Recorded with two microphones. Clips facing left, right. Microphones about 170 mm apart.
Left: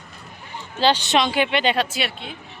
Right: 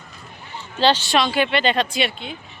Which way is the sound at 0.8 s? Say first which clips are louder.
Right 1 dB; 15° left (ahead or behind).